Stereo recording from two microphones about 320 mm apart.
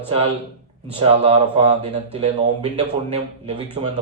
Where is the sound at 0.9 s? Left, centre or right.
Centre.